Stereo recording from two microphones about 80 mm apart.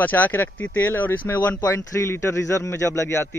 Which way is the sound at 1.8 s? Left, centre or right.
Left.